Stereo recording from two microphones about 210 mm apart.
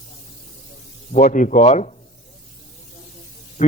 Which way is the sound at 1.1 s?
35° left (ahead or behind).